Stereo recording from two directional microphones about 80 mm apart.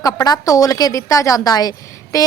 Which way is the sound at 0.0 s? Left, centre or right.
Left.